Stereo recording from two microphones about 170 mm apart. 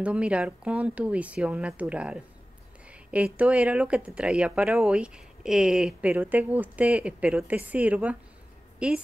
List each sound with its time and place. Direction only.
0.0 s speech: 5° right (ahead or behind)
2.9 s a sound: 5° right (ahead or behind)
3.3 s a woman's voice: 10° right (ahead or behind)